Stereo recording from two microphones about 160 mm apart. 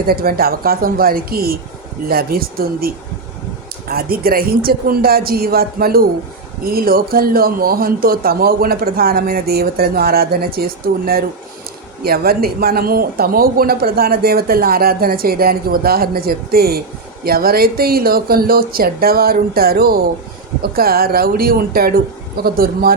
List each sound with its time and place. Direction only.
0.1 s speech: 70° right (ahead or behind)